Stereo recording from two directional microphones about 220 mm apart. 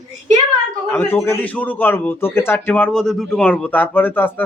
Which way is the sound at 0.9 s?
10° left (ahead or behind).